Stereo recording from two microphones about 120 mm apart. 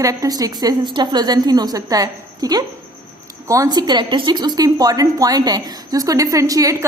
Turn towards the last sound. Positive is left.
turn(degrees=-30)  # may be behind; listen again after turning